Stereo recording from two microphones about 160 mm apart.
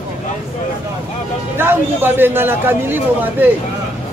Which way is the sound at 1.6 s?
15° right (ahead or behind).